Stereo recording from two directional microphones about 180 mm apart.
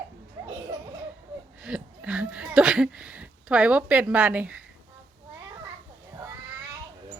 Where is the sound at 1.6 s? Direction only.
5° right (ahead or behind).